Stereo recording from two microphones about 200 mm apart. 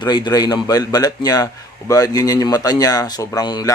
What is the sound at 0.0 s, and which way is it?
A man's voice, 20° left (ahead or behind).